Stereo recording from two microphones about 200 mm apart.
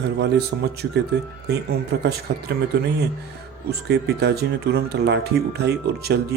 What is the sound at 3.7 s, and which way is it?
Speech, 55° right (ahead or behind).